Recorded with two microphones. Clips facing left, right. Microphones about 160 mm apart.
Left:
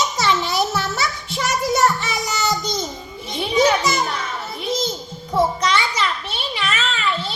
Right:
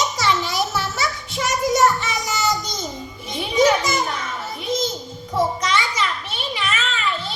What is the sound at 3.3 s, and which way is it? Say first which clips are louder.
Music: left 1 dB; 30° left (ahead or behind).